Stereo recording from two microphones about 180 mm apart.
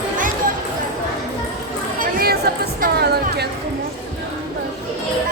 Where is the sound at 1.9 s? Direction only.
60° right (ahead or behind).